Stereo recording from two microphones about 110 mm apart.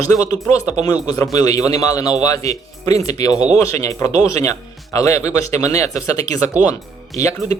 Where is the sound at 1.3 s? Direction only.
35° left (ahead or behind).